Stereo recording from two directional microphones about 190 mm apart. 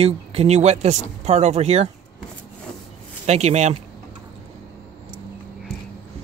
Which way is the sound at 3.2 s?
35° right (ahead or behind).